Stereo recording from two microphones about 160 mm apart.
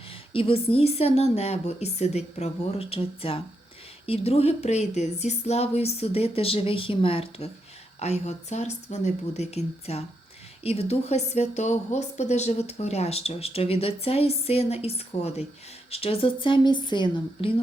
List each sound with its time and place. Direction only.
0.1 s a woman's voice: 35° left (ahead or behind)